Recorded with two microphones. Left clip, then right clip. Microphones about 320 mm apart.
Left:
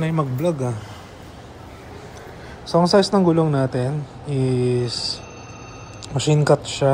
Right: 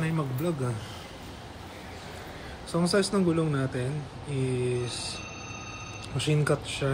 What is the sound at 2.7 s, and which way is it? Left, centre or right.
Speech, centre.